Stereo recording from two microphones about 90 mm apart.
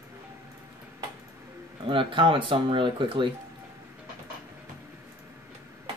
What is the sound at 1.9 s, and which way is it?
Speech, 70° right (ahead or behind).